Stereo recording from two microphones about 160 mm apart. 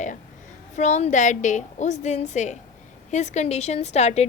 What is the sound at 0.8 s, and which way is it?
Speech, 45° left (ahead or behind).